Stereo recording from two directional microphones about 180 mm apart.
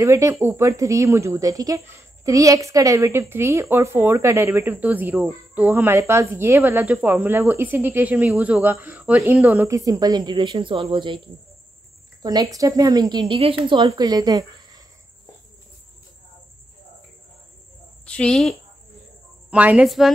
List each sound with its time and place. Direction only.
0.0 s speech: 15° right (ahead or behind)
12.2 s speech: 20° right (ahead or behind)
18.0 s a woman's voice: 5° left (ahead or behind)
19.5 s a woman's voice: 5° right (ahead or behind)